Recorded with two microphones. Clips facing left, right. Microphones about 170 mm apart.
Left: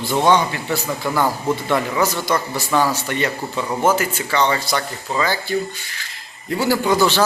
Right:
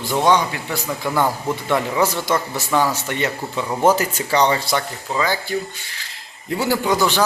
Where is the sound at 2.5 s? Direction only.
20° right (ahead or behind).